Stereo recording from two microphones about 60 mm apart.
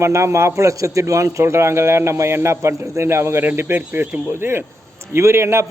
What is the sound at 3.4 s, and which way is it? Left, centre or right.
A man's voice, right.